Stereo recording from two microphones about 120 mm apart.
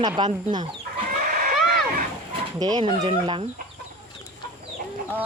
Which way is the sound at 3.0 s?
45° right (ahead or behind).